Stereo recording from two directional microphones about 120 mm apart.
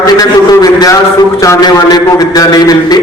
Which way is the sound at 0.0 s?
30° left (ahead or behind).